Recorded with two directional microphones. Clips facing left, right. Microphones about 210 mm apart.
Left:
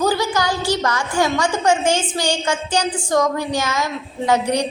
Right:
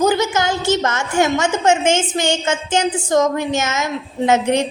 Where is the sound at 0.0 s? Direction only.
20° right (ahead or behind).